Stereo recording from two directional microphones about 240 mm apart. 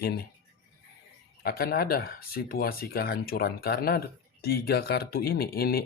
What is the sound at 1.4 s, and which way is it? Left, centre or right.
Speech, left.